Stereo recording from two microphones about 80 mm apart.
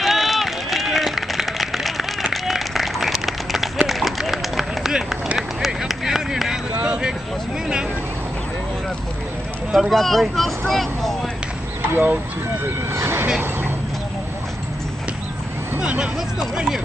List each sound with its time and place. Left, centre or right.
0.0 s run: centre
6.8 s a sound: centre
9.7 s speech: centre
10.7 s vehicle: centre
11.9 s speech: right
12.9 s a sound: right
15.8 s speech: centre